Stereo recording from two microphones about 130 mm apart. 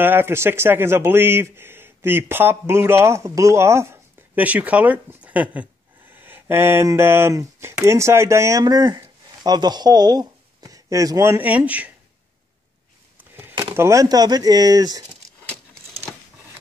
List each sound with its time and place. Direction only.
0.0 s speech: 15° right (ahead or behind)
13.2 s a sound: 15° right (ahead or behind)
13.7 s speech: 25° right (ahead or behind)